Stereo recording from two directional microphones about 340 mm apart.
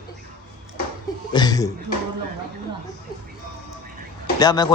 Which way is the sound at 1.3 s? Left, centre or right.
Centre.